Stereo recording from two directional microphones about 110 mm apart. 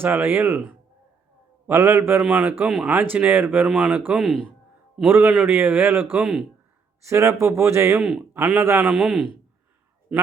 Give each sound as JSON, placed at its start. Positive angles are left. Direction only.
{"t": 0.0, "sound": "speech", "side_deg": -20}
{"t": 2.6, "sound": "speech", "side_deg": -5}
{"t": 8.9, "sound": "a man's voice", "side_deg": -5}